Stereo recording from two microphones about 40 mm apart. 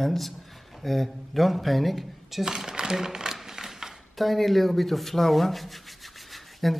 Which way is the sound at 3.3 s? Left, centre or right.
Centre.